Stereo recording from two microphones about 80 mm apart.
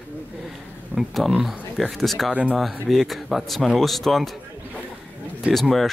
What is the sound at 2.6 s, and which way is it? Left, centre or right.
Speech, centre.